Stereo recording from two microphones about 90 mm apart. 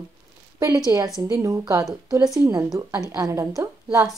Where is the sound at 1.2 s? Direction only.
35° right (ahead or behind).